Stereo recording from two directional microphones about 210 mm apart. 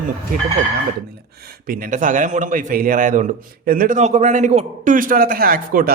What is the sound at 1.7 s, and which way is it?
A man's voice, 40° right (ahead or behind).